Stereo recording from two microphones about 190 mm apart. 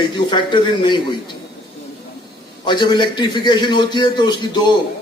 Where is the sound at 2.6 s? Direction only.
25° left (ahead or behind).